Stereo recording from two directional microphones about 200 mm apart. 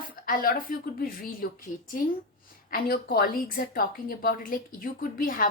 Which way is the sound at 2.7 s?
50° left (ahead or behind).